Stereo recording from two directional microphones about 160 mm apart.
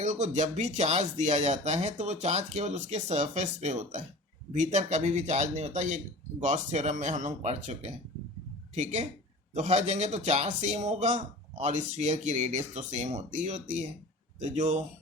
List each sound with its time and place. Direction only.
0.0 s a man's voice: 45° right (ahead or behind)